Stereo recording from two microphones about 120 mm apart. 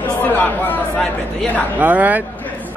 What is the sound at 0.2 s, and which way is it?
Speech, 15° left (ahead or behind).